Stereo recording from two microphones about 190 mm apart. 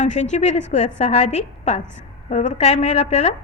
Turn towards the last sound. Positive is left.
turn(degrees=35)  # may be behind; listen again after turning